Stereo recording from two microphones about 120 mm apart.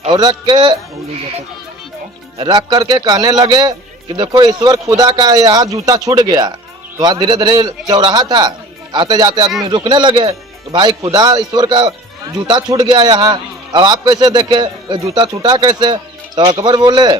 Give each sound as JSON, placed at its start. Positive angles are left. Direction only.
{"t": 0.1, "sound": "speech", "side_deg": -35}
{"t": 2.4, "sound": "speech", "side_deg": -35}